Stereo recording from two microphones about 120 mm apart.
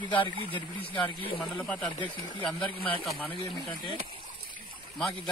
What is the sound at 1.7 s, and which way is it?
Speech, 10° left (ahead or behind).